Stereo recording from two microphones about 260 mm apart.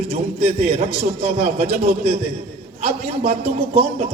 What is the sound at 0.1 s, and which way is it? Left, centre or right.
A man's voice, right.